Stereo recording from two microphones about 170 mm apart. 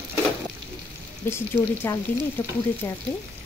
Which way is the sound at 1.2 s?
15° left (ahead or behind).